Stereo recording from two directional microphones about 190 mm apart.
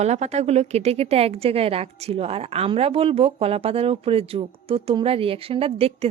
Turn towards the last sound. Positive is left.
turn(degrees=-30)  # may be behind; listen again after turning